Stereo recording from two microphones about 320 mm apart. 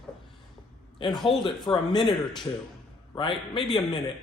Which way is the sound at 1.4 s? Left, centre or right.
Centre.